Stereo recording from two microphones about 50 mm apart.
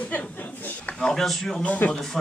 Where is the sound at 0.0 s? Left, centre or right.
Left.